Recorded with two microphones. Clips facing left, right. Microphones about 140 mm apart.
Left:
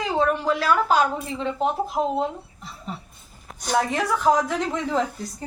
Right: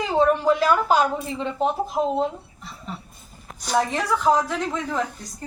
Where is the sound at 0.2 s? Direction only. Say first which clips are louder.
Right 5 dB; 10° right (ahead or behind).